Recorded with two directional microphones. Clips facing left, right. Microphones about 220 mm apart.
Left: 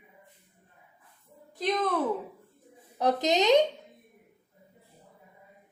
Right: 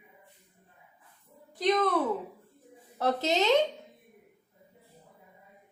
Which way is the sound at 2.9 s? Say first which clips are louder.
Left 2 dB; 15° left (ahead or behind).